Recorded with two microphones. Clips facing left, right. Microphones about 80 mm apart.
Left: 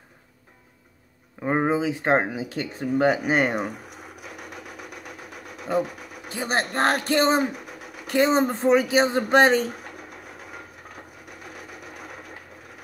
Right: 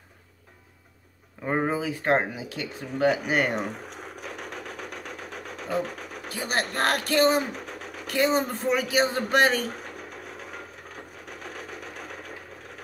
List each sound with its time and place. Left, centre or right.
1.4 s speech: centre
2.5 s speech: left
3.5 s sewing machine: centre
6.2 s speech: left
7.5 s a sound: centre
8.1 s speech: left
11.2 s sewing machine: centre